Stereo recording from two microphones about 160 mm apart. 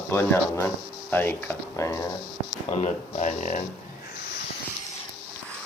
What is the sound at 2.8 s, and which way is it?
Speech, 45° left (ahead or behind).